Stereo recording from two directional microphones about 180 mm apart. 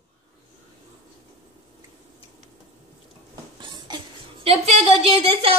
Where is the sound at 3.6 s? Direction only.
25° right (ahead or behind).